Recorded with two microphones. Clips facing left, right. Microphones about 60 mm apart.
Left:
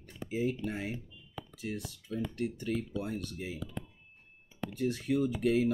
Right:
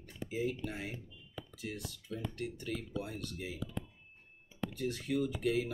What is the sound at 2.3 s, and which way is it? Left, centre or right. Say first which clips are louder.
Speech: left 6 dB; left.